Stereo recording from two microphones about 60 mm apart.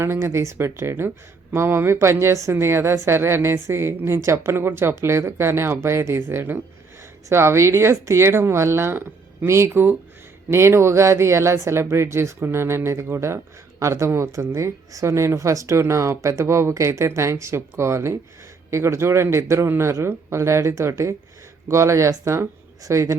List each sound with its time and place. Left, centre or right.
0.0 s a woman's voice: right
3.2 s a woman's voice: right